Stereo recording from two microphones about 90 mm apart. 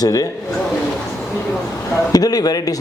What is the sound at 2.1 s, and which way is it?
Speech, 45° left (ahead or behind).